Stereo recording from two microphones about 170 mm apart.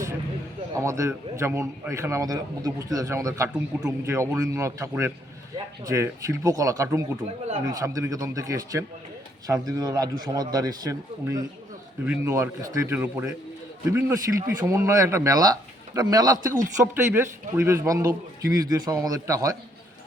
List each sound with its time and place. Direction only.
0.7 s a man's voice: 20° right (ahead or behind)
7.3 s speech: 35° right (ahead or behind)
7.6 s a man's voice: 20° right (ahead or behind)